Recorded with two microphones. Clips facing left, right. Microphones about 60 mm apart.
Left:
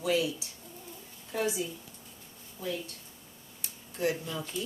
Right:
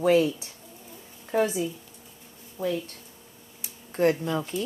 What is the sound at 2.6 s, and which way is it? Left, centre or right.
Speech, right.